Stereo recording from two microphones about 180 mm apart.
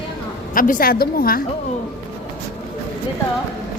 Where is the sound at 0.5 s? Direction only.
50° left (ahead or behind).